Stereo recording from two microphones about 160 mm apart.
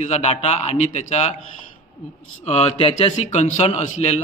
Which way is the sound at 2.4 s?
45° left (ahead or behind).